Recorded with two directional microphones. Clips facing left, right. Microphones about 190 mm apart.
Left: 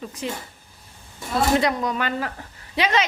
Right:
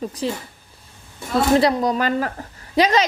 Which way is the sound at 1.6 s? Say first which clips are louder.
Right 5 dB; 35° right (ahead or behind).